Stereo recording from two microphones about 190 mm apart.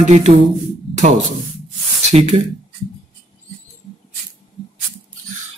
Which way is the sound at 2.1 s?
35° right (ahead or behind).